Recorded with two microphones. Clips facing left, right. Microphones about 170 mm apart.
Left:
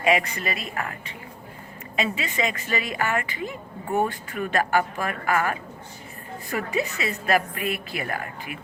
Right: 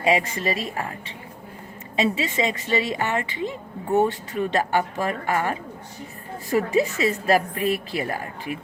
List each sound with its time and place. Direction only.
0.0 s a woman's voice: 25° right (ahead or behind)
2.0 s a woman's voice: 25° right (ahead or behind)